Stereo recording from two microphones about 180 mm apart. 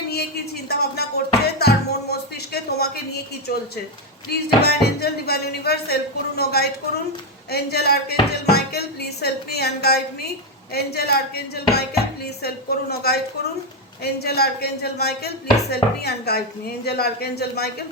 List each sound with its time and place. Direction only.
0.1 s a sound: 60° left (ahead or behind)
1.5 s music: 65° left (ahead or behind)
4.3 s speech: 60° left (ahead or behind)